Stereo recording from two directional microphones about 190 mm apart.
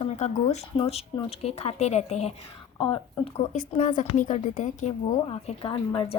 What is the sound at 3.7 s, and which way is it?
A woman's voice, 40° left (ahead or behind).